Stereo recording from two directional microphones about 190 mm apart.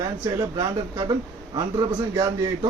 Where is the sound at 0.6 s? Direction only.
20° right (ahead or behind).